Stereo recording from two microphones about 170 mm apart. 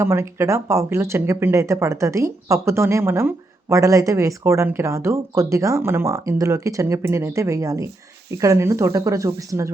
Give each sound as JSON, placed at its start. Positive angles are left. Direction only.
{"t": 0.0, "sound": "speech", "side_deg": -15}